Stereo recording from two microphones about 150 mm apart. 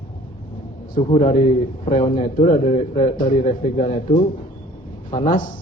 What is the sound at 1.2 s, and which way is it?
Speech, 50° left (ahead or behind).